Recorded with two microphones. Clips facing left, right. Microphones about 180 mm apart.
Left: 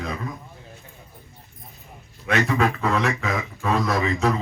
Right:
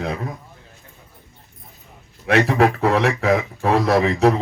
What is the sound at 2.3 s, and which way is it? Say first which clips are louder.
A man's voice: right 5 dB; 70° right (ahead or behind).